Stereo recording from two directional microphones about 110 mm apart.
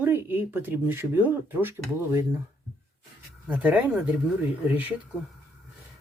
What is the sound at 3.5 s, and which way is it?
Speech, 10° right (ahead or behind).